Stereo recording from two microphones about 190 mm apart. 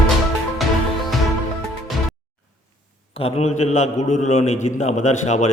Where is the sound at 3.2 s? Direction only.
35° left (ahead or behind).